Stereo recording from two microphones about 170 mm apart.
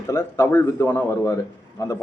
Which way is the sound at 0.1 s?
15° left (ahead or behind).